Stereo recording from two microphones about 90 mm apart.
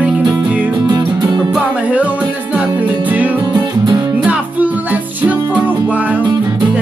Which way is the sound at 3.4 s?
60° right (ahead or behind).